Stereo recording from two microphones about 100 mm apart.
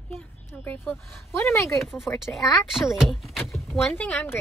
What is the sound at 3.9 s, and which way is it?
Speech, 20° left (ahead or behind).